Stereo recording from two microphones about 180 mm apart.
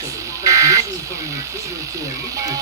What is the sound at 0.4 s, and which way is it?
Buzzer, 15° right (ahead or behind).